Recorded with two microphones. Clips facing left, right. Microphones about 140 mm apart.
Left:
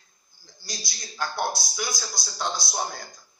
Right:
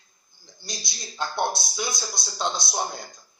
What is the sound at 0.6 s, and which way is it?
A man's voice, 25° right (ahead or behind).